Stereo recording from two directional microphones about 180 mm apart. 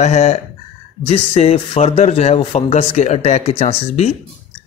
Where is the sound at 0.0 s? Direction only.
35° left (ahead or behind).